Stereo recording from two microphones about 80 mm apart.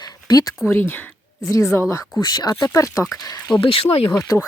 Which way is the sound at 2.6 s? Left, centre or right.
Left.